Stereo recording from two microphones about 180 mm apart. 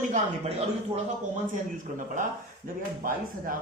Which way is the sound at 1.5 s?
45° right (ahead or behind).